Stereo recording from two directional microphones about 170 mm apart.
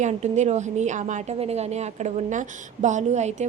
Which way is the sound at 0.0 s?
40° right (ahead or behind).